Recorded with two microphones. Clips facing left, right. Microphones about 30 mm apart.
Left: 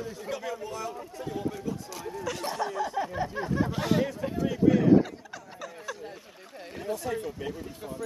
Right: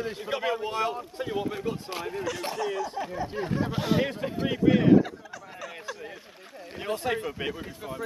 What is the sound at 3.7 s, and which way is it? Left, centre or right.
Speech, centre.